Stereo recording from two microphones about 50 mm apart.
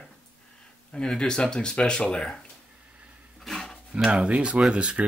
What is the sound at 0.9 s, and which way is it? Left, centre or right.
Speech, centre.